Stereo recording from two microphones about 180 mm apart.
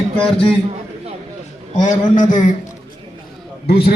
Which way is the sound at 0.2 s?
5° left (ahead or behind).